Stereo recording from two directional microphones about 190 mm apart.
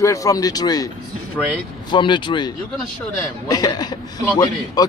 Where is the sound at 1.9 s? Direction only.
25° left (ahead or behind).